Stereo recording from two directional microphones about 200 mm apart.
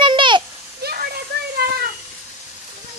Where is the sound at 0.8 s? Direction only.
50° right (ahead or behind).